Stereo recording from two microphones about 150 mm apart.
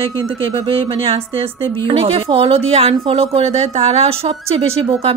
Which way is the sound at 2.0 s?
40° right (ahead or behind).